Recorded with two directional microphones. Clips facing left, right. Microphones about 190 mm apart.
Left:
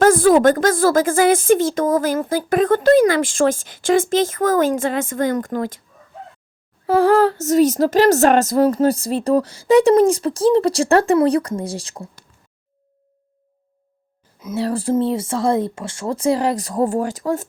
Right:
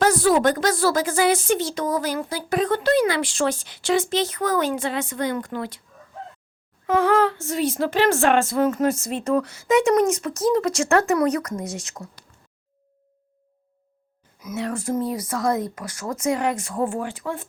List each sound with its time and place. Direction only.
0.0 s a woman's voice: 50° left (ahead or behind)
6.8 s speech: 35° left (ahead or behind)
14.3 s speech: 30° left (ahead or behind)